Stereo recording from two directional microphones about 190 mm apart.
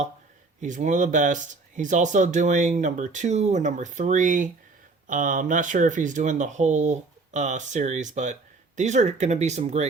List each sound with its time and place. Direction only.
0.6 s speech: 40° right (ahead or behind)